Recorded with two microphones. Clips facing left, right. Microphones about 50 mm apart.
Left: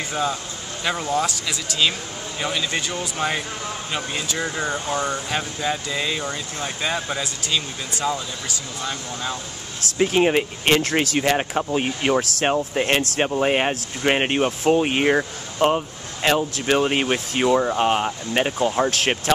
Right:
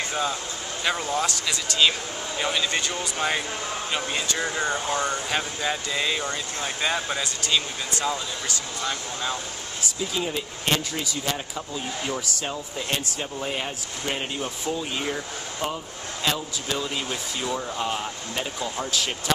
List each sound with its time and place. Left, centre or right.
0.1 s speech: centre
9.9 s speech: left
18.9 s speech: left